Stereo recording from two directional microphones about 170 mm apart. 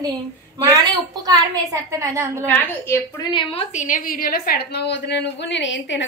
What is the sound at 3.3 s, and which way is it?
Speech, 30° left (ahead or behind).